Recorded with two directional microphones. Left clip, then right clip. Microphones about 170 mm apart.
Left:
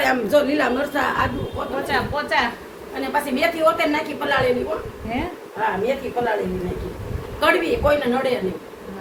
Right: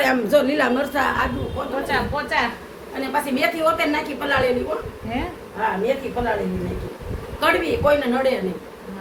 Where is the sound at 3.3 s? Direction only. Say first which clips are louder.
Left 2 dB; 15° right (ahead or behind).